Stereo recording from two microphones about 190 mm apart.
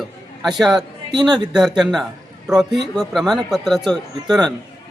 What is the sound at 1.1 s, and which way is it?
Speech, 25° right (ahead or behind).